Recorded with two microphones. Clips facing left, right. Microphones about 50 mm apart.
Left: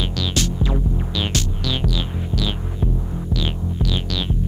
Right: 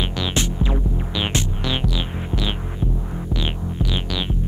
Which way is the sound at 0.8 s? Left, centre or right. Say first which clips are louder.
Left 1 dB; centre.